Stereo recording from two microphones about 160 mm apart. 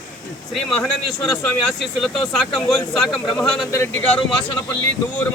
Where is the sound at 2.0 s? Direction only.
Centre (ahead or behind).